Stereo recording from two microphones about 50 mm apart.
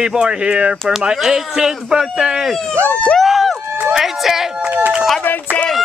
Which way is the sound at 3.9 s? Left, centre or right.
Centre.